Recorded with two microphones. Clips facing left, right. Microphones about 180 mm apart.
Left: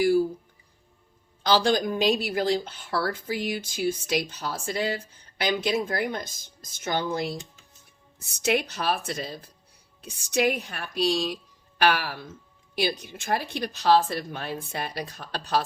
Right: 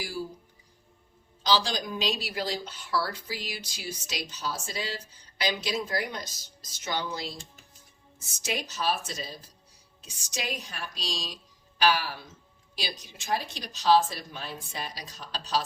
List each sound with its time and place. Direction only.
1.5 s a woman's voice: 55° left (ahead or behind)